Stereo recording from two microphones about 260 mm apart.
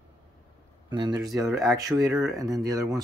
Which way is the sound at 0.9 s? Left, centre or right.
Centre.